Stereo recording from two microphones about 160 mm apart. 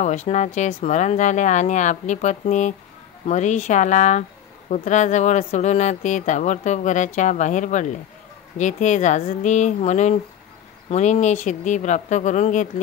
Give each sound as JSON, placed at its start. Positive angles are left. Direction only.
{"t": 0.0, "sound": "speech", "side_deg": 45}